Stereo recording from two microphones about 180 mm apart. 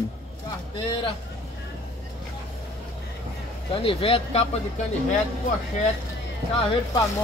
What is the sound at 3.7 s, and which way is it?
Speech, 30° left (ahead or behind).